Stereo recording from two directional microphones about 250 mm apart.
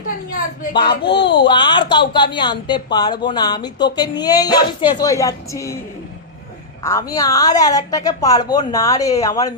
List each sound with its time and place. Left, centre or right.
0.7 s speech: centre
1.0 s speech: left
1.4 s a woman's voice: centre
6.8 s a woman's voice: centre